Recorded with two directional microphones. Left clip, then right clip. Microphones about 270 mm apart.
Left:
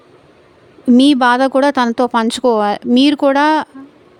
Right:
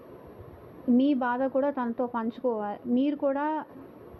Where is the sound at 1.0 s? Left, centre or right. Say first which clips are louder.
Left 18 dB; left.